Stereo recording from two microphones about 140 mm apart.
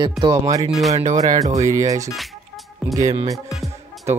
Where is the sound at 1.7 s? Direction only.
25° right (ahead or behind).